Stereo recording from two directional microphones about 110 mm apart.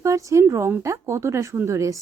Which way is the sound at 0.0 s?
30° right (ahead or behind).